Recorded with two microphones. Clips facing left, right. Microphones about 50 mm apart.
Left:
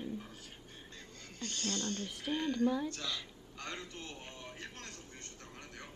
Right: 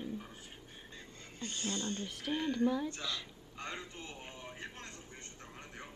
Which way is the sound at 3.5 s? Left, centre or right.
Centre.